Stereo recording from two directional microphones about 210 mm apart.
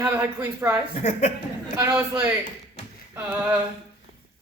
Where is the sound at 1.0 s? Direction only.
35° left (ahead or behind).